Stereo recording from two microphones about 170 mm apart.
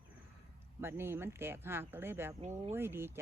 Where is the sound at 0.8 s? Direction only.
15° right (ahead or behind).